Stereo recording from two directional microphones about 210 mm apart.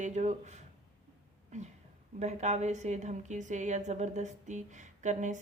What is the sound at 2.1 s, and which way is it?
A woman's voice, 35° right (ahead or behind).